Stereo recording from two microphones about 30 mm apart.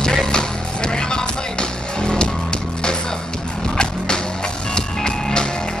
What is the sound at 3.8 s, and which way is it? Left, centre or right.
Skateboard, left.